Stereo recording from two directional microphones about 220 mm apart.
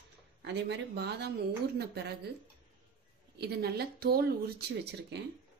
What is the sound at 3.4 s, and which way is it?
A woman's voice, 45° right (ahead or behind).